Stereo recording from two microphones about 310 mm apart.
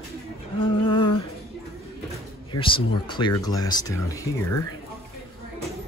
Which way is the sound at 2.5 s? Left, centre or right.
Centre.